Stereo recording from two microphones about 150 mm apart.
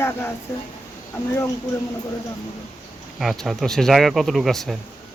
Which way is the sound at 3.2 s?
Centre (ahead or behind).